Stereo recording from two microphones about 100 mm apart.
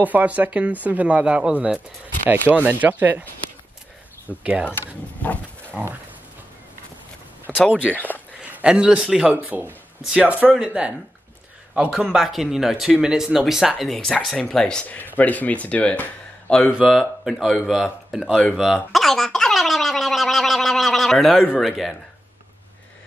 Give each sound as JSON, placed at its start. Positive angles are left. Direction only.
{"t": 0.0, "sound": "a man's voice", "side_deg": -15}
{"t": 4.3, "sound": "a man's voice", "side_deg": -15}
{"t": 4.6, "sound": "speech", "side_deg": 15}
{"t": 7.5, "sound": "a sound", "side_deg": 0}
{"t": 7.9, "sound": "speech", "side_deg": 15}
{"t": 8.5, "sound": "a man's voice", "side_deg": -15}
{"t": 16.7, "sound": "speech", "side_deg": -5}
{"t": 18.5, "sound": "gargling", "side_deg": -5}